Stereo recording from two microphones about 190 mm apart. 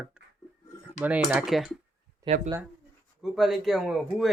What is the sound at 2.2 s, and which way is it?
Speech, 35° right (ahead or behind).